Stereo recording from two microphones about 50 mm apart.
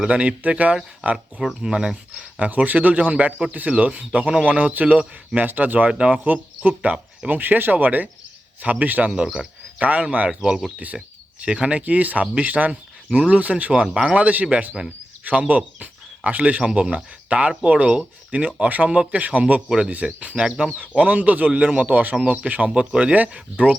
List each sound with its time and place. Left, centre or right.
0.1 s a man's voice: right
1.6 s speech: centre
2.4 s a man's voice: right
5.9 s speech: right
6.2 s a man's voice: right
9.0 s speech: centre
9.8 s speech: right
10.2 s speech: centre
10.9 s speech: centre
11.4 s a man's voice: right
13.8 s speech: centre
14.2 s speech: right
20.9 s a man's voice: right